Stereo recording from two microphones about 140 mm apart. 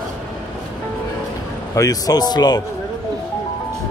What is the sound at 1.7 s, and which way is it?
Speech, 25° left (ahead or behind).